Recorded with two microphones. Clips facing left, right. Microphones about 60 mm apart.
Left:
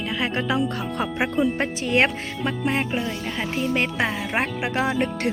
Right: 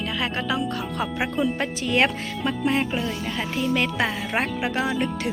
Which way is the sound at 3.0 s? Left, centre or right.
Centre.